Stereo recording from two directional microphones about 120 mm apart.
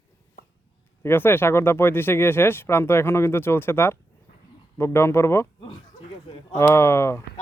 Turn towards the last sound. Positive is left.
turn(degrees=20)  # may be behind; listen again after turning